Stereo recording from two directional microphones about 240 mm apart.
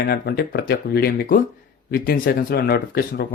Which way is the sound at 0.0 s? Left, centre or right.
Left.